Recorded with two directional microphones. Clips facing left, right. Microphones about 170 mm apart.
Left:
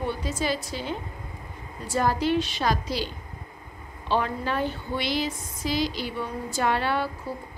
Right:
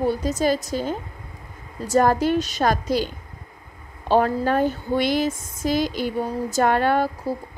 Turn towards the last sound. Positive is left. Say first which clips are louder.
# right 7 dB
turn(degrees=-45)  # may be behind; listen again after turning